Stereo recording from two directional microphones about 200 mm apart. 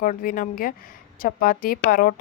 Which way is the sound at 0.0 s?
45° left (ahead or behind).